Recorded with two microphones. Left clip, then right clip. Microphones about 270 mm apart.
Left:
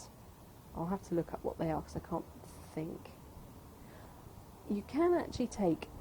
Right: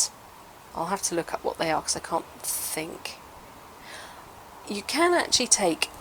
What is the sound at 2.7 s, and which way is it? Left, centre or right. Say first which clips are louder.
Speech: right 6 dB; centre.